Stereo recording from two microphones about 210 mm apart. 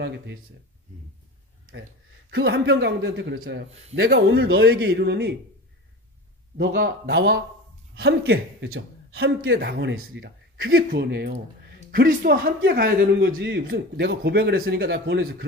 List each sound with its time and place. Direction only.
2.3 s a man's voice: 55° right (ahead or behind)
6.6 s a man's voice: 45° right (ahead or behind); by 10.2 s 70° right (ahead or behind)
10.2 s a man's voice: 50° right (ahead or behind)